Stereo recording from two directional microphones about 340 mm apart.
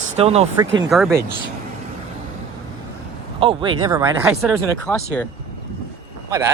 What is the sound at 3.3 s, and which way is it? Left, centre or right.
Speech, centre.